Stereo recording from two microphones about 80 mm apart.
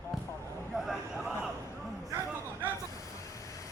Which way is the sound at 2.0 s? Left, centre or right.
Right.